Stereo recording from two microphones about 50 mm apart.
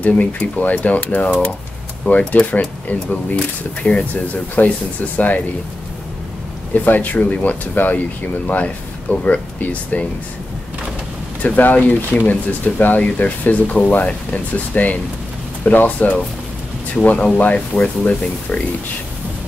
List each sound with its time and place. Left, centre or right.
0.0 s speech: left
6.7 s speech: left
11.4 s speech: left